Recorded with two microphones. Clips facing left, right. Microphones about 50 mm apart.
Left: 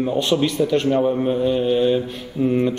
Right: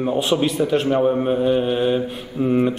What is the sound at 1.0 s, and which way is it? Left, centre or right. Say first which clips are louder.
Mantra: right 1 dB; right.